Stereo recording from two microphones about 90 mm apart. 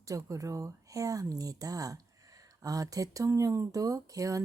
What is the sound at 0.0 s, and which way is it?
Speech, 35° right (ahead or behind).